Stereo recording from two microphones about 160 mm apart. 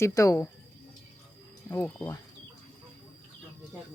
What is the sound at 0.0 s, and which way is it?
Speech, 20° left (ahead or behind).